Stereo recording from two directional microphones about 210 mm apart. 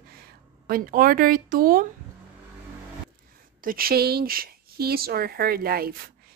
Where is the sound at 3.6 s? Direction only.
45° right (ahead or behind).